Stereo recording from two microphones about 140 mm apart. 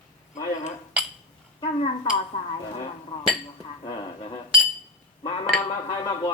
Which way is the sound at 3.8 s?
35° left (ahead or behind).